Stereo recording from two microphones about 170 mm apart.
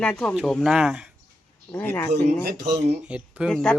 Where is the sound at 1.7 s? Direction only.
15° left (ahead or behind).